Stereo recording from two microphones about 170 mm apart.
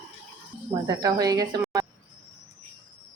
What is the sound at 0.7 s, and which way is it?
Speech, 25° right (ahead or behind).